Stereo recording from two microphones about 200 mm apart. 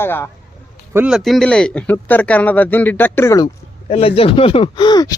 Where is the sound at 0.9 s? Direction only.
5° right (ahead or behind); by 3.5 s 15° left (ahead or behind).